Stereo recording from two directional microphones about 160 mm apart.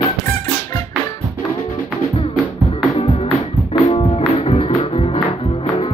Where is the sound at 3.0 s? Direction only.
30° left (ahead or behind).